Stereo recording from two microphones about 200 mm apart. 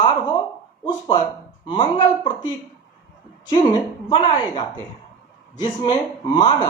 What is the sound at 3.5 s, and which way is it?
Speech, 20° left (ahead or behind).